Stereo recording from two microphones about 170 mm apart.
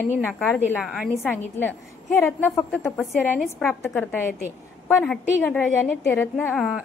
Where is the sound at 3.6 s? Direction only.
10° left (ahead or behind).